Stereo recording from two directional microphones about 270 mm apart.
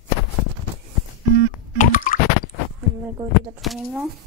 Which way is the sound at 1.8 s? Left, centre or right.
Left.